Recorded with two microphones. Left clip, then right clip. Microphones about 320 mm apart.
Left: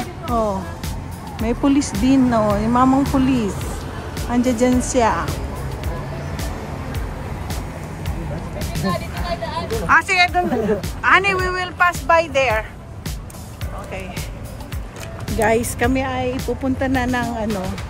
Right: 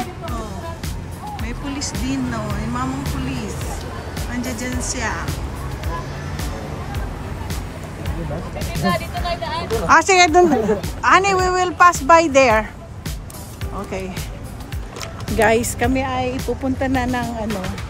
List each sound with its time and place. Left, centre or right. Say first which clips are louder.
1.4 s speech: left 12 dB; centre
4.6 s speech: left 9 dB; centre
8.5 s speech: right 3 dB; centre
12.1 s speech: right 4 dB; centre
15.2 s speech: right 2 dB; centre